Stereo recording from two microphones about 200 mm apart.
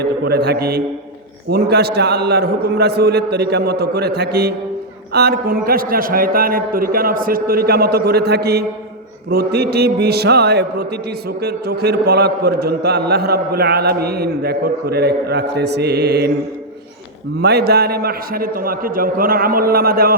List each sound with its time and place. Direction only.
0.0 s a man's voice: 55° right (ahead or behind)
17.4 s a man's voice: 55° right (ahead or behind)